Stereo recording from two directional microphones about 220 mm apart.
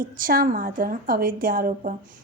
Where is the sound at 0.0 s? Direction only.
40° right (ahead or behind).